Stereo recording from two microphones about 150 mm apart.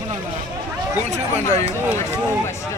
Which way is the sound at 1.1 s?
50° right (ahead or behind).